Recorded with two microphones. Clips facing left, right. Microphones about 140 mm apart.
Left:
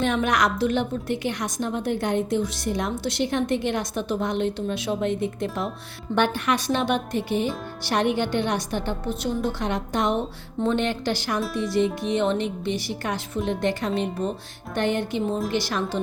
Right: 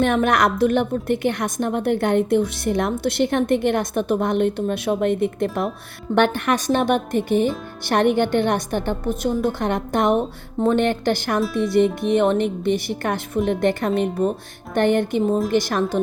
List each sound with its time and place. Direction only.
0.0 s a woman's voice: 55° right (ahead or behind)